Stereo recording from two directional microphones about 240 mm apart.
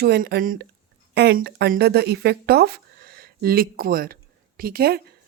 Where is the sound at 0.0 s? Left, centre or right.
Right.